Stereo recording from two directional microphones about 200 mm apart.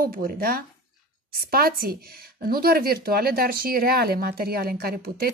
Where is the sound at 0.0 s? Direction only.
50° right (ahead or behind).